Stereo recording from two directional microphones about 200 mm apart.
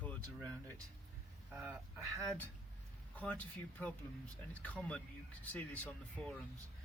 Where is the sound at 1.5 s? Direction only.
10° right (ahead or behind).